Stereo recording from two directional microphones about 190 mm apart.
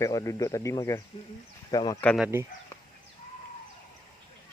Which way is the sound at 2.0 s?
5° left (ahead or behind).